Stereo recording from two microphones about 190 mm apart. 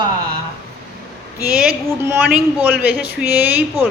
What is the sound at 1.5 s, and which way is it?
Speech, 5° right (ahead or behind).